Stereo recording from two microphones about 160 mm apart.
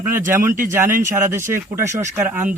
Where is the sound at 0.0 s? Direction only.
15° right (ahead or behind).